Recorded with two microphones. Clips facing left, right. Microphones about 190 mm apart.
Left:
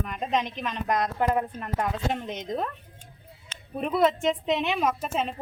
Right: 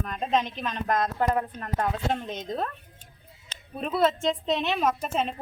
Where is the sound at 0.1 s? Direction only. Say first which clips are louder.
Right 3 dB; 15° left (ahead or behind).